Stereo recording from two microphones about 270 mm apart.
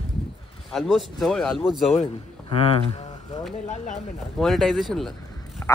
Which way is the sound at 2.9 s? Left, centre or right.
Left.